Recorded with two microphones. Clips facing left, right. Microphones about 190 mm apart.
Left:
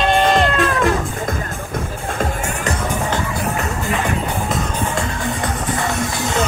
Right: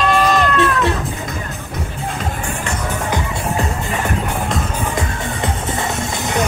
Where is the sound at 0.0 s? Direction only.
30° left (ahead or behind).